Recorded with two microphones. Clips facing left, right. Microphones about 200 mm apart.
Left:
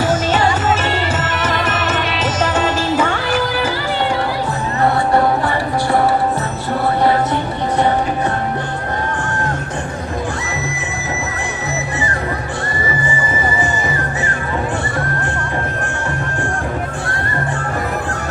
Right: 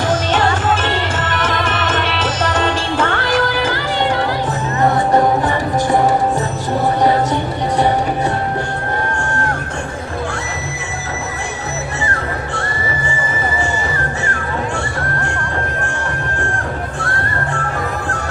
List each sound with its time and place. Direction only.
0.0 s music: 10° left (ahead or behind)
4.8 s music: 20° right (ahead or behind)